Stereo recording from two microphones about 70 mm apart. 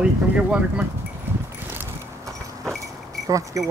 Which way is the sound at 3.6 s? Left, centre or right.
Right.